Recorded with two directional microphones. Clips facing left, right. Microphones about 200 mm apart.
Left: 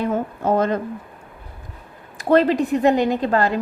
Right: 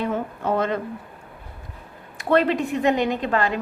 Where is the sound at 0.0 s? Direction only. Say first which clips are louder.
Left 3 dB; 40° left (ahead or behind).